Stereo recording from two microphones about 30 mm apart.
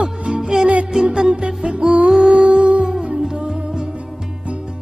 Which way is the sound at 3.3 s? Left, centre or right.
Right.